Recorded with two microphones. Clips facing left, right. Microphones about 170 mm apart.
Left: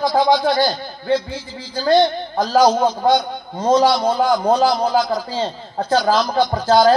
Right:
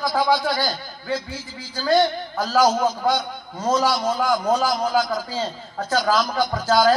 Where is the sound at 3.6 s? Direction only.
30° left (ahead or behind).